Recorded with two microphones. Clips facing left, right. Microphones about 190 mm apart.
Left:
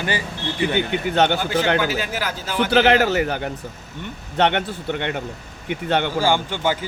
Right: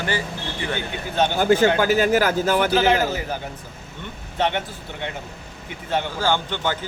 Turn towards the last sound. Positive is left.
turn(degrees=10)  # may be behind; listen again after turning